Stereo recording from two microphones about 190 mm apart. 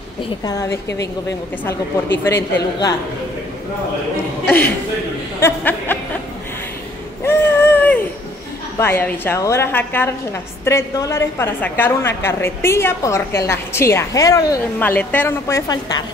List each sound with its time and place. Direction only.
0.4 s a woman's voice: 20° left (ahead or behind)
2.2 s a woman's voice: 15° left (ahead or behind)
4.5 s a woman's voice: 10° left (ahead or behind)
7.2 s a sound: 10° left (ahead or behind)
8.7 s a woman's voice: 10° left (ahead or behind)